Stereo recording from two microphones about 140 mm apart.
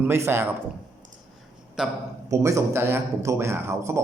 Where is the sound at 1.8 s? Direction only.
5° right (ahead or behind).